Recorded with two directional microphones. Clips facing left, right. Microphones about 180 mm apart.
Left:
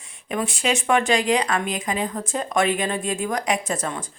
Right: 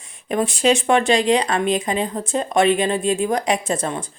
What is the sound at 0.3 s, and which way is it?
Speech, 35° right (ahead or behind).